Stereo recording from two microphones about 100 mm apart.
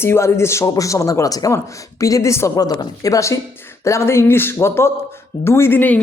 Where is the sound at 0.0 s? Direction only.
25° left (ahead or behind).